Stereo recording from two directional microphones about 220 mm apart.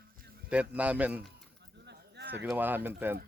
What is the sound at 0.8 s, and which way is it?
Speech, 5° right (ahead or behind).